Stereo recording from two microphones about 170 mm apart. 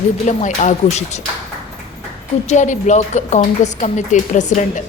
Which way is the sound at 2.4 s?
45° left (ahead or behind).